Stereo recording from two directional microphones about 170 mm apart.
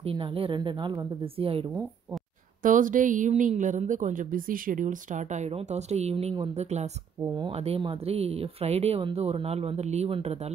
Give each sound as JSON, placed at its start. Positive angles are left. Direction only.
{"t": 0.0, "sound": "speech", "side_deg": -30}
{"t": 2.6, "sound": "speech", "side_deg": -50}